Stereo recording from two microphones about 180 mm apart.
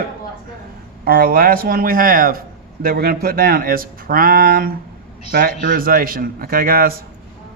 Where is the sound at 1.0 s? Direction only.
55° right (ahead or behind).